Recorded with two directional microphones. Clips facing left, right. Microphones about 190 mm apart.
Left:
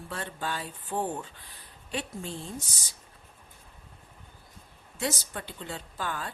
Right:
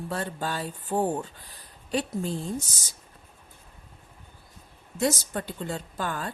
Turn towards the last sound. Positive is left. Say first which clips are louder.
# right 3 dB
turn(degrees=-45)  # may be behind; listen again after turning